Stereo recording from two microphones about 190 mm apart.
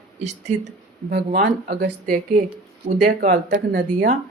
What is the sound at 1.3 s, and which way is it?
Speech, 50° right (ahead or behind).